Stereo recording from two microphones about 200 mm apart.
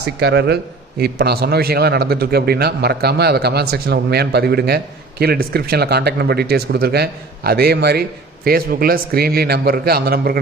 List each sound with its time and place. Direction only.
0.0 s a man's voice: 55° right (ahead or behind)